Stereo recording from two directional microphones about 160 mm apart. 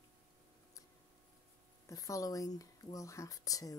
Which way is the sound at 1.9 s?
20° left (ahead or behind).